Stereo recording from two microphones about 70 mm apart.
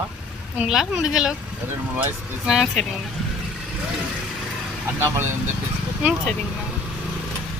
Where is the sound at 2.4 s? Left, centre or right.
Centre.